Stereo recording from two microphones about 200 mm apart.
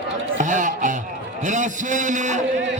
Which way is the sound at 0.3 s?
40° right (ahead or behind).